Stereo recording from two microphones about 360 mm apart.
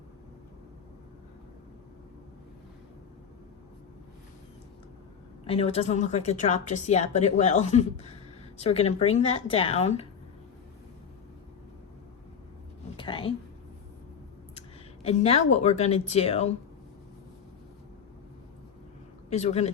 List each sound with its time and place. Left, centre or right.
5.5 s a woman's voice: centre
13.0 s a sound: centre
15.0 s speech: centre
19.3 s speech: centre